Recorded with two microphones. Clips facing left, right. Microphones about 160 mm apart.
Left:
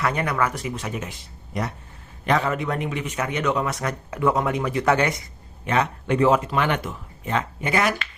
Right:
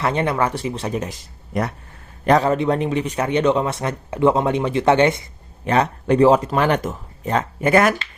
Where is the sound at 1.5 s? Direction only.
50° right (ahead or behind).